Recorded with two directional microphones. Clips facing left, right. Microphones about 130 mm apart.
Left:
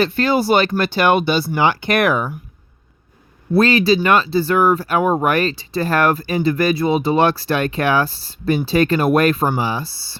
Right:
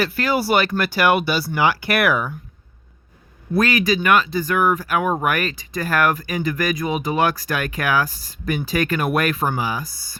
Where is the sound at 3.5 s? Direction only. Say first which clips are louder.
Left 5 dB; 30° left (ahead or behind).